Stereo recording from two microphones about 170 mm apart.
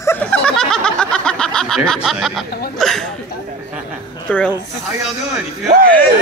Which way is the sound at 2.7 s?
Centre (ahead or behind).